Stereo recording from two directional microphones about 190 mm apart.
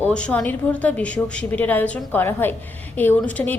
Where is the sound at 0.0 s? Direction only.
5° left (ahead or behind).